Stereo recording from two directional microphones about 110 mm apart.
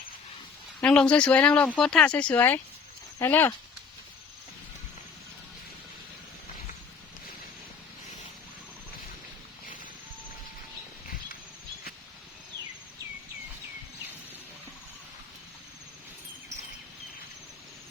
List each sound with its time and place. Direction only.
0.8 s speech: 10° left (ahead or behind)